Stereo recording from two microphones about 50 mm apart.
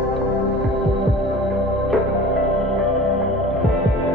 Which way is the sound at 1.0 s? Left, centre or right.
Centre.